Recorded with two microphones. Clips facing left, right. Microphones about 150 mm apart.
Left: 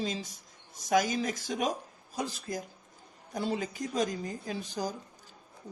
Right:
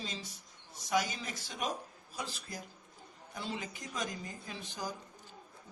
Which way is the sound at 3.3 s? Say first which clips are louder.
Left 8 dB; 40° left (ahead or behind).